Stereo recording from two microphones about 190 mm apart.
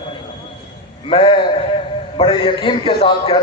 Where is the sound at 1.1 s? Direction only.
25° left (ahead or behind).